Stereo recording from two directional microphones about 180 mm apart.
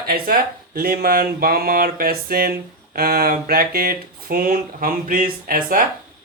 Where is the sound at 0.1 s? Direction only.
55° right (ahead or behind).